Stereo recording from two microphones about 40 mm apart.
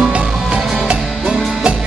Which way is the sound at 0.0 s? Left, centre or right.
Right.